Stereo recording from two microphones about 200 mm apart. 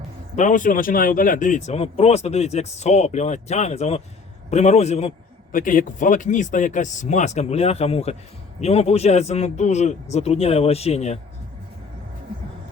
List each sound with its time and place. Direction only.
0.3 s speech: 40° left (ahead or behind)